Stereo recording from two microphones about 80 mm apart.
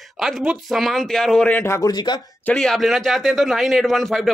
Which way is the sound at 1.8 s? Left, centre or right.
Left.